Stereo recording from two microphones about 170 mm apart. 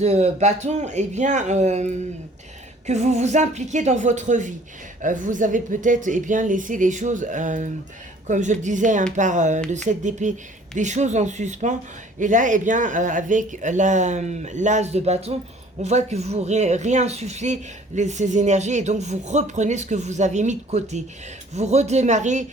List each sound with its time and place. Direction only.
0.0 s speech: 40° right (ahead or behind)